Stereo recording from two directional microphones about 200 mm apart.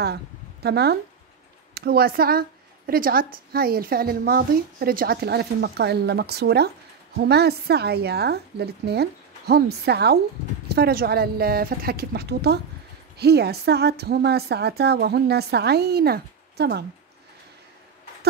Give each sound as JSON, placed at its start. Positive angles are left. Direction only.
{"t": 0.0, "sound": "a woman's voice", "side_deg": -55}